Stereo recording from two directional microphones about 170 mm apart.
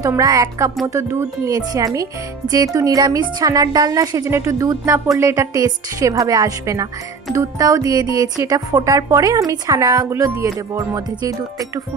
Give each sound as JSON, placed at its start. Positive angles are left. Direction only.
{"t": 0.0, "sound": "speech", "side_deg": -20}